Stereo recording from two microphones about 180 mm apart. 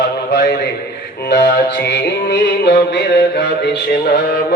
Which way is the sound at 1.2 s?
70° left (ahead or behind).